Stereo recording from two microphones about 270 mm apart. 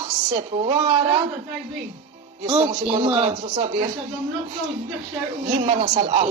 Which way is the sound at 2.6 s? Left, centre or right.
Right.